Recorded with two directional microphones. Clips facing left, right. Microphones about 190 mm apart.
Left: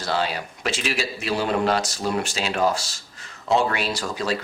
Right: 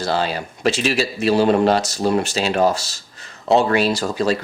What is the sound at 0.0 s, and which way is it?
Speech, 35° right (ahead or behind).